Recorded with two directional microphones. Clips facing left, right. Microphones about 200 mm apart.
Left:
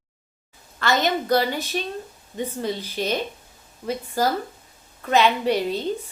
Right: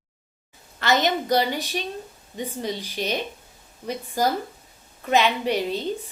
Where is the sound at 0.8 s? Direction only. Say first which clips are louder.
Even; 20° right (ahead or behind).